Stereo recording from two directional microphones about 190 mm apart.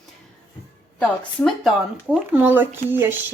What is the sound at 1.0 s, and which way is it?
Speech, centre (ahead or behind).